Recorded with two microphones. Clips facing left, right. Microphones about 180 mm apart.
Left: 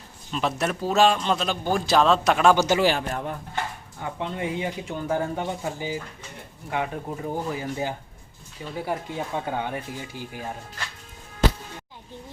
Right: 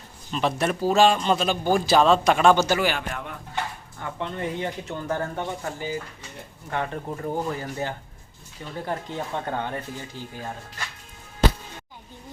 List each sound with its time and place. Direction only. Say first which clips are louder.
0.3 s speech: right 2 dB; centre (ahead or behind)
2.8 s a man's voice: left 4 dB; 35° left (ahead or behind)
4.0 s speech: left 1 dB; 10° left (ahead or behind)